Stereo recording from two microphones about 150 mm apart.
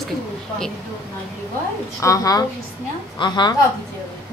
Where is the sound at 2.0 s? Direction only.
20° left (ahead or behind).